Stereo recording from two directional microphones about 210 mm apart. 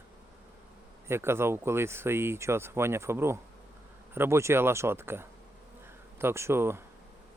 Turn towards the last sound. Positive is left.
turn(degrees=-10)  # may be behind; listen again after turning